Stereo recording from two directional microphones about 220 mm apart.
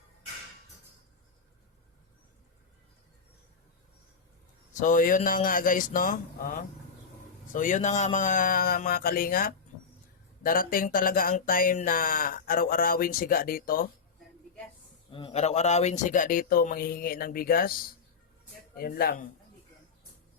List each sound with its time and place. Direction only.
4.7 s speech: 35° left (ahead or behind)
15.1 s speech: 25° left (ahead or behind)